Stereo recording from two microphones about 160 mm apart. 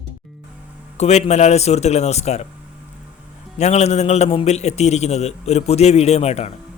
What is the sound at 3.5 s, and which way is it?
A man's voice, 45° left (ahead or behind).